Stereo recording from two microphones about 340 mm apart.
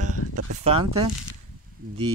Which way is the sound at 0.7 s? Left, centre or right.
Centre.